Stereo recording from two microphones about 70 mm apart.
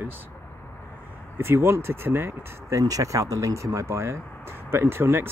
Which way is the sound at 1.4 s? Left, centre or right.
Right.